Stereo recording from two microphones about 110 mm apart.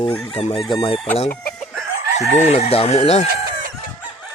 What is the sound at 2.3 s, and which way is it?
Speech, 85° left.